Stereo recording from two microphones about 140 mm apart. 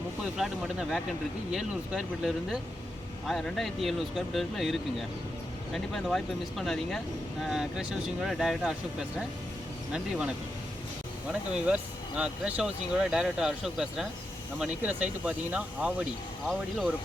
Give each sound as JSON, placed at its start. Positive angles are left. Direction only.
{"t": 0.3, "sound": "speech", "side_deg": 0}